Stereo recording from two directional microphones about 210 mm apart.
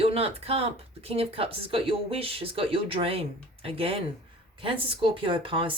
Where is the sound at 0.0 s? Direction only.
30° right (ahead or behind).